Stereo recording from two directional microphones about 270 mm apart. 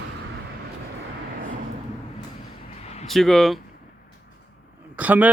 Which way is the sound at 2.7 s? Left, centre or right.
Left.